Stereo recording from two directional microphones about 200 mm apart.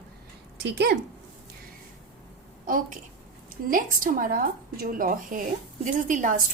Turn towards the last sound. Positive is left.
turn(degrees=-40)  # may be behind; listen again after turning